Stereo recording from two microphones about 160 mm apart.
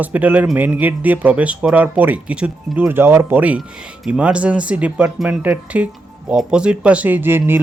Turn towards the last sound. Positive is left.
turn(degrees=-15)  # may be behind; listen again after turning